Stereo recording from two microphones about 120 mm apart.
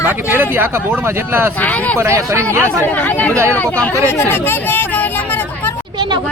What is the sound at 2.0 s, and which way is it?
Speech, 20° right (ahead or behind).